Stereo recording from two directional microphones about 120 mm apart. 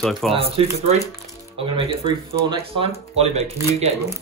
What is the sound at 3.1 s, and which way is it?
Speech, 65° right (ahead or behind).